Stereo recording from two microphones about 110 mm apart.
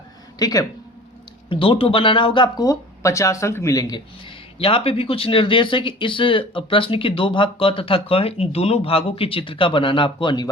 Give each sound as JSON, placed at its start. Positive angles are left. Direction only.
{"t": 0.3, "sound": "speech", "side_deg": 35}
{"t": 1.5, "sound": "speech", "side_deg": 50}
{"t": 2.6, "sound": "speech", "side_deg": 30}
{"t": 4.6, "sound": "speech", "side_deg": 55}